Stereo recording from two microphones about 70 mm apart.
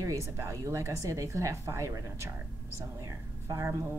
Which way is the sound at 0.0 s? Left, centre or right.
Right.